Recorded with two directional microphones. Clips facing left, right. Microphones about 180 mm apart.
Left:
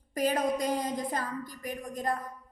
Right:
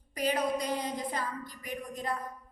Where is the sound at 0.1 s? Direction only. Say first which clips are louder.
Left 2 dB; 45° left (ahead or behind).